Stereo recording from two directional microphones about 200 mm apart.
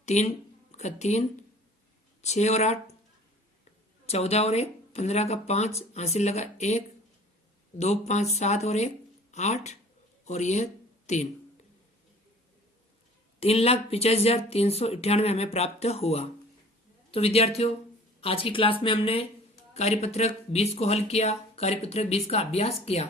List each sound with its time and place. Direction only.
0.0 s speech: 35° left (ahead or behind)
2.2 s speech: 35° left (ahead or behind)
4.0 s speech: 30° left (ahead or behind)
13.4 s speech: 30° left (ahead or behind)